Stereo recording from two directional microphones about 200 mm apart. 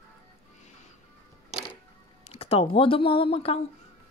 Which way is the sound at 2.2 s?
30° left (ahead or behind).